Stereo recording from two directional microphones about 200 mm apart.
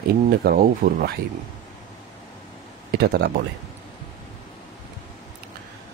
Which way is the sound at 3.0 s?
55° right (ahead or behind).